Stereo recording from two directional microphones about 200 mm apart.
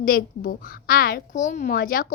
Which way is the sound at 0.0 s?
45° left (ahead or behind).